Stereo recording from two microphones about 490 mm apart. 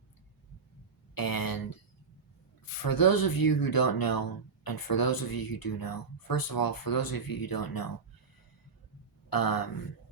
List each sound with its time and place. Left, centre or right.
1.1 s a sound: left
2.6 s speech: left
9.3 s speech: left